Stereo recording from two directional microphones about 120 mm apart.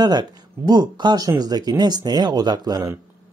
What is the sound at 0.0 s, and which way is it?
Speech, 35° right (ahead or behind).